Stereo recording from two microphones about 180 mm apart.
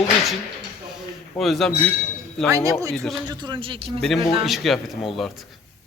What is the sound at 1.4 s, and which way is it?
Speech, centre (ahead or behind).